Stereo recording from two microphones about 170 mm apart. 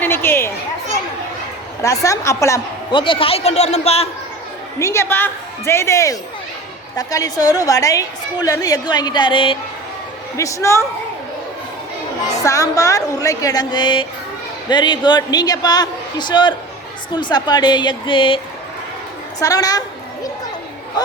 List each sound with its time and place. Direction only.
0.0 s chatter: 15° left (ahead or behind)
1.8 s a woman's voice: 20° left (ahead or behind)
2.9 s a man's voice: 30° left (ahead or behind)
4.8 s a woman's voice: 15° left (ahead or behind)
10.3 s a woman's voice: 20° left (ahead or behind)
12.4 s a woman's voice: 20° left (ahead or behind)
19.4 s a woman's voice: 20° left (ahead or behind)